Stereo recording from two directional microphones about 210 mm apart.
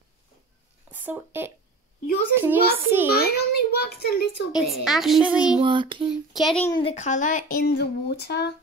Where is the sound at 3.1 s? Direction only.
50° left (ahead or behind).